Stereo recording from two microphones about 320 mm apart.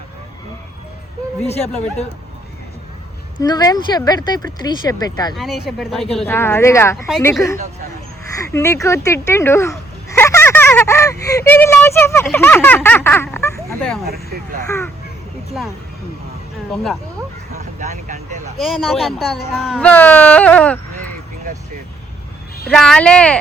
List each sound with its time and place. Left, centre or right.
1.5 s speech: centre
3.3 s speech: centre
5.3 s speech: centre
16.7 s speech: centre
17.7 s vehicle: right
18.6 s speech: centre
22.7 s speech: centre